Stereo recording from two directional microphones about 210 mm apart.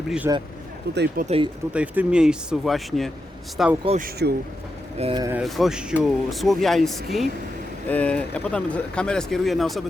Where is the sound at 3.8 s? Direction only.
35° right (ahead or behind).